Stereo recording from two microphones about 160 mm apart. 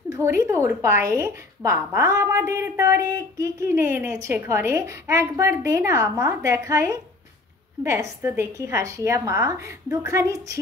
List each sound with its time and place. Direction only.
0.1 s a woman's voice: 20° right (ahead or behind)